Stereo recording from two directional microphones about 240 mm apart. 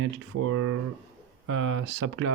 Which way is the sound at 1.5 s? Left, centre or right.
Right.